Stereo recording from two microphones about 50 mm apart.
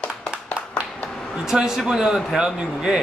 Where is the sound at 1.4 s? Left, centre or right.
Centre.